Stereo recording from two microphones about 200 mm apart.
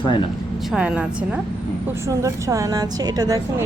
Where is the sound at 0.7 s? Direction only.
5° right (ahead or behind).